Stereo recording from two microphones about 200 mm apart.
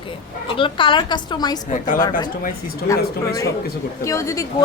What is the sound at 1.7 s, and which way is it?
Speech, 40° left (ahead or behind).